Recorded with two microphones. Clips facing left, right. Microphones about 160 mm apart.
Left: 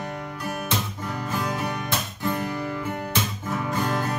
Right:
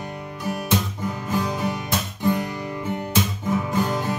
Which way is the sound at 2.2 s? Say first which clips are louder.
Right 4 dB; 15° right (ahead or behind).